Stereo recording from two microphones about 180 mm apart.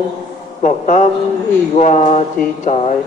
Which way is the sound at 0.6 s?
45° left (ahead or behind).